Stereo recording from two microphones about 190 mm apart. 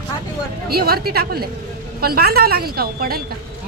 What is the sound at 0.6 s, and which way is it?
A woman's voice, 55° right (ahead or behind).